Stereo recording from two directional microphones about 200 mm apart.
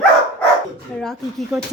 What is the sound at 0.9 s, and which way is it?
Speech, centre (ahead or behind).